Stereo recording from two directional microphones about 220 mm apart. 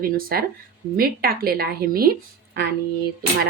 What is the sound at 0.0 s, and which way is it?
Speech, 40° right (ahead or behind).